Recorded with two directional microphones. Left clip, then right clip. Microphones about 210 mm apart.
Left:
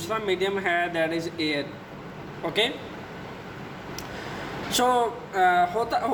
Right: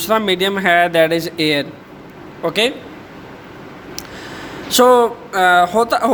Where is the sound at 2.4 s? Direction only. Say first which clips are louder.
Right 9 dB; 40° right (ahead or behind).